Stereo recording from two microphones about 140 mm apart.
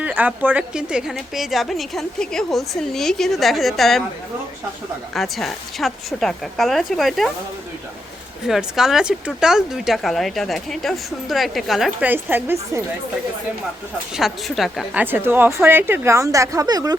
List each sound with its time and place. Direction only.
0.0 s a woman's voice: 10° right (ahead or behind)
5.1 s a woman's voice: centre (ahead or behind)
8.4 s a woman's voice: 5° right (ahead or behind)
12.0 s a woman's voice: 15° right (ahead or behind)
14.1 s a woman's voice: centre (ahead or behind)
15.0 s a woman's voice: 15° right (ahead or behind)